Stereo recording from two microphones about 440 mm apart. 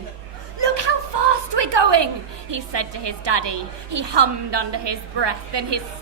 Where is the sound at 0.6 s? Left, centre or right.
Right.